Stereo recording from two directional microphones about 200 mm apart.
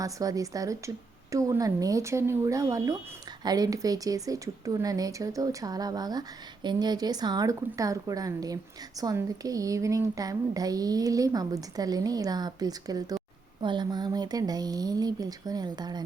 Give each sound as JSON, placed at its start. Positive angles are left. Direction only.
{"t": 0.0, "sound": "speech", "side_deg": -15}